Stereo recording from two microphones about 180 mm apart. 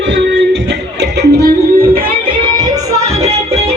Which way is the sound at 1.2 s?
60° right (ahead or behind).